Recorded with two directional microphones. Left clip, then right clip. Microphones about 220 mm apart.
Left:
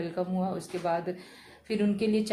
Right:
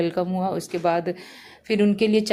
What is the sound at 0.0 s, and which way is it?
A woman's voice, 40° right (ahead or behind).